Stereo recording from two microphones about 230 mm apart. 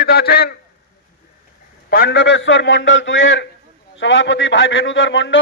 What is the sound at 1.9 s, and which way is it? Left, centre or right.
A man's voice, left.